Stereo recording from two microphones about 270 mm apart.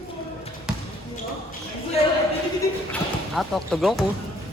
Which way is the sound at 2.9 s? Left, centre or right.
Centre.